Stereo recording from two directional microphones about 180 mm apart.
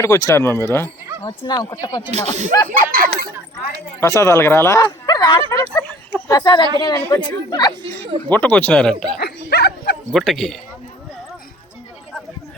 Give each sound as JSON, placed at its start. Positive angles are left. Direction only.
{"t": 0.0, "sound": "speech", "side_deg": 15}
{"t": 1.2, "sound": "speech", "side_deg": 25}
{"t": 2.0, "sound": "speech", "side_deg": -40}
{"t": 2.9, "sound": "speech", "side_deg": -55}
{"t": 4.0, "sound": "speech", "side_deg": 20}
{"t": 6.1, "sound": "a sound", "side_deg": 10}
{"t": 6.3, "sound": "speech", "side_deg": 25}
{"t": 8.3, "sound": "speech", "side_deg": 10}
{"t": 9.1, "sound": "bow-wow", "side_deg": 60}
{"t": 10.1, "sound": "a man's voice", "side_deg": 0}